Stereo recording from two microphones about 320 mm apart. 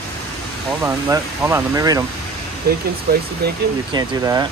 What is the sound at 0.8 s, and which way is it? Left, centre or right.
Speech, centre.